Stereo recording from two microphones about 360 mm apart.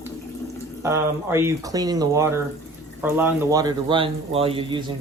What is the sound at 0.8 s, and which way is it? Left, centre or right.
Speech, centre.